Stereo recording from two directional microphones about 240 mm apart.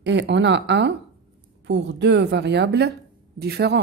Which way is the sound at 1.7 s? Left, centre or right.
Right.